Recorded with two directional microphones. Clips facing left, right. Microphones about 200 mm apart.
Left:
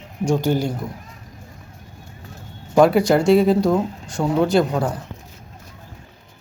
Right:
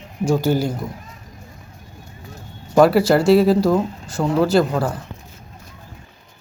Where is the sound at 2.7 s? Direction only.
5° right (ahead or behind).